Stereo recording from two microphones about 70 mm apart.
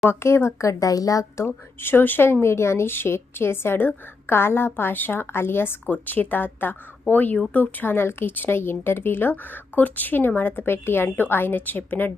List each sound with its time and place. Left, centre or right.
0.1 s speech: left
0.7 s a woman's voice: left
1.5 s speech: left